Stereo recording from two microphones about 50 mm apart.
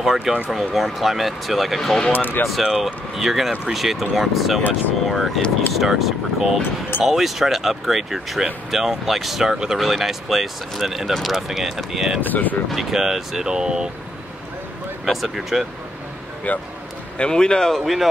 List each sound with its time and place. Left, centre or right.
0.0 s speech: centre
2.1 s speech: left
2.6 s speech: centre
9.5 s speech: centre
9.8 s speech: centre
12.3 s speech: left
12.7 s speech: centre
15.0 s speech: centre
16.5 s speech: left
17.2 s speech: centre